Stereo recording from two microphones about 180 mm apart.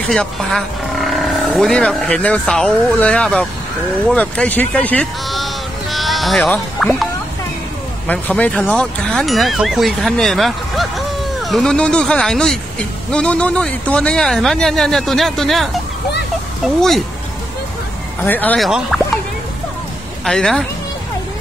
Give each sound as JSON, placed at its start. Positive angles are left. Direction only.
{"t": 0.0, "sound": "speech", "side_deg": 5}
{"t": 8.1, "sound": "speech", "side_deg": 10}
{"t": 18.2, "sound": "speech", "side_deg": 10}
{"t": 20.2, "sound": "speech", "side_deg": 5}